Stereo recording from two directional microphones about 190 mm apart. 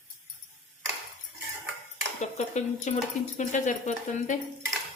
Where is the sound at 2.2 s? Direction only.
40° left (ahead or behind).